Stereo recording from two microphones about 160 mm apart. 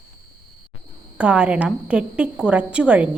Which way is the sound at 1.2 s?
10° right (ahead or behind).